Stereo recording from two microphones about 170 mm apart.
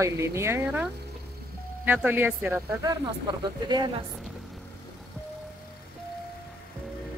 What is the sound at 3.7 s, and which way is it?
Speech, 25° right (ahead or behind).